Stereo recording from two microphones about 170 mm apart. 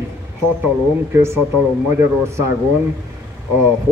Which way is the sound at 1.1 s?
15° right (ahead or behind).